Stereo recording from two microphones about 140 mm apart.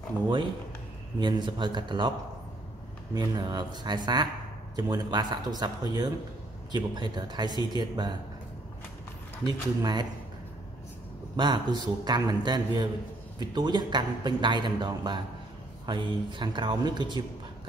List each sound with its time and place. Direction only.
1.2 s a man's voice: 30° right (ahead or behind)
3.2 s a man's voice: 30° right (ahead or behind)
9.4 s speech: 30° right (ahead or behind)
11.3 s a man's voice: 30° right (ahead or behind)